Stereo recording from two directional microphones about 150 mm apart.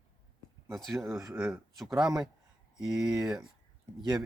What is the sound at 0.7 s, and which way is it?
Speech, centre (ahead or behind).